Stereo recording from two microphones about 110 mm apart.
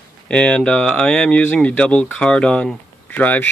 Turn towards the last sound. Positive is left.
turn(degrees=15)  # may be behind; listen again after turning